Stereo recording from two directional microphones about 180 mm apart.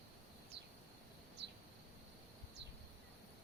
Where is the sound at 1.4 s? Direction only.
70° right (ahead or behind).